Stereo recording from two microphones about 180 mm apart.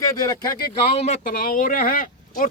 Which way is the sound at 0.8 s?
35° left (ahead or behind).